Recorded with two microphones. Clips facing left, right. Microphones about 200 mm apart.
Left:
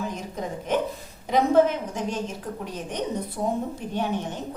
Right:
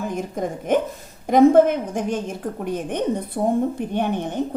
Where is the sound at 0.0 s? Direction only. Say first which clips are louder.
Right 6 dB; 50° right (ahead or behind).